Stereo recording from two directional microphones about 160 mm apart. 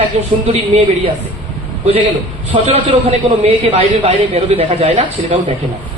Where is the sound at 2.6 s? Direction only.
40° right (ahead or behind).